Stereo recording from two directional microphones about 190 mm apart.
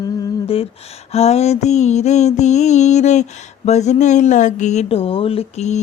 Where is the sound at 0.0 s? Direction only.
25° left (ahead or behind).